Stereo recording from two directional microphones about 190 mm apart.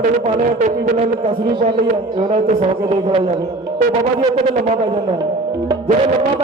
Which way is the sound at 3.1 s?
30° right (ahead or behind).